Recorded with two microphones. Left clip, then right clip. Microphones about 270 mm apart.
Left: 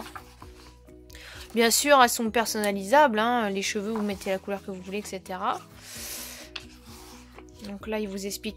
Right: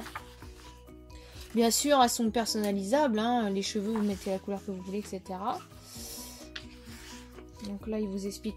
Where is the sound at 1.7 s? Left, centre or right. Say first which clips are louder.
Left 6 dB; left.